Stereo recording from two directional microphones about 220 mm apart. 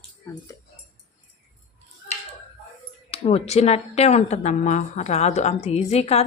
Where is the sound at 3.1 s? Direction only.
25° left (ahead or behind).